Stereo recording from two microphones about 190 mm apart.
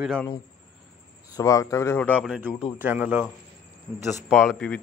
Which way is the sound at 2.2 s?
5° right (ahead or behind).